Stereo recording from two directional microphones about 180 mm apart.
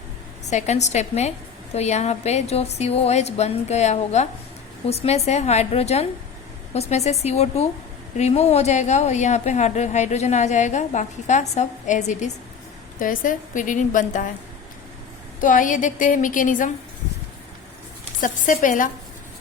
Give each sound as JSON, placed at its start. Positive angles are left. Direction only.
{"t": 0.5, "sound": "a woman's voice", "side_deg": 40}
{"t": 15.4, "sound": "a woman's voice", "side_deg": 45}
{"t": 18.2, "sound": "a woman's voice", "side_deg": 45}